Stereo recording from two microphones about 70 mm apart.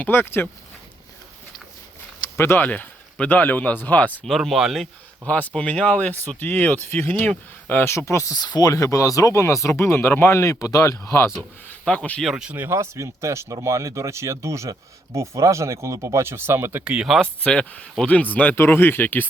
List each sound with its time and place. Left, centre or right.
0.0 s speech: left
2.3 s speech: left
2.6 s speech: left
4.3 s speech: centre
5.3 s speech: left
7.9 s speech: left
8.4 s speech: left
8.7 s speech: left
11.7 s speech: left
12.2 s speech: centre
12.5 s speech: right
16.8 s speech: centre
17.2 s speech: centre; by 19.3 s left